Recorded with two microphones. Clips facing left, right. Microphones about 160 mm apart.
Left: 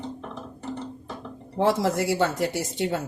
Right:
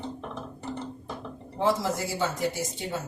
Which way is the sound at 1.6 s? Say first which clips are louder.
Left 4 dB; 65° left (ahead or behind).